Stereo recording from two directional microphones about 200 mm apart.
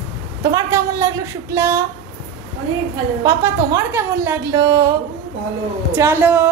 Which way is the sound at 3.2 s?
15° right (ahead or behind).